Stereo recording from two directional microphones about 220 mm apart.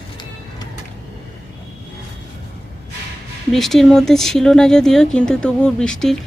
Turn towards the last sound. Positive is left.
turn(degrees=5)  # may be behind; listen again after turning